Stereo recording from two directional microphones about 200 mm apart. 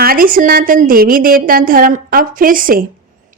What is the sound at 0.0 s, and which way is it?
A woman's voice, 45° right (ahead or behind).